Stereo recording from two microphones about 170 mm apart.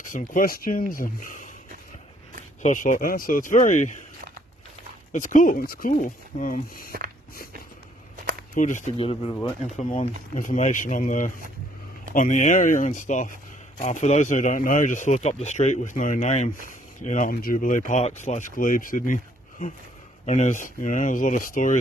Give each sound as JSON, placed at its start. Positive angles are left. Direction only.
{"t": 0.1, "sound": "speech", "side_deg": 55}
{"t": 2.6, "sound": "a man's voice", "side_deg": 50}
{"t": 5.1, "sound": "a man's voice", "side_deg": 50}
{"t": 8.5, "sound": "a man's voice", "side_deg": 45}
{"t": 8.9, "sound": "a man's voice", "side_deg": 35}
{"t": 20.2, "sound": "a man's voice", "side_deg": 45}